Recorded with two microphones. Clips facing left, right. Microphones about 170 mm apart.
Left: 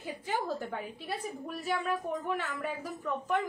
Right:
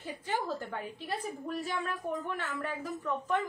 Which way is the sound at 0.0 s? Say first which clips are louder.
Left 1 dB; 10° left (ahead or behind).